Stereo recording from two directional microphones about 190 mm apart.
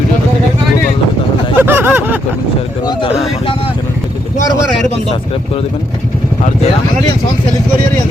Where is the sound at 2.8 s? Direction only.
30° left (ahead or behind).